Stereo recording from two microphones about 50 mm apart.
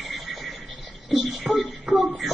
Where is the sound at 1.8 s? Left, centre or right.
Right.